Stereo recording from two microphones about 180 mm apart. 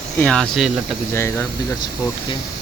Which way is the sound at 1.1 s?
15° left (ahead or behind).